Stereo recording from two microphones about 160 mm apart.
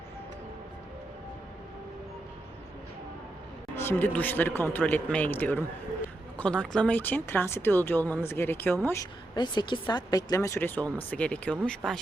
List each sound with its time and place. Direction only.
3.8 s speech: 15° left (ahead or behind)
9.3 s speech: 25° left (ahead or behind); by 11.9 s 5° left (ahead or behind)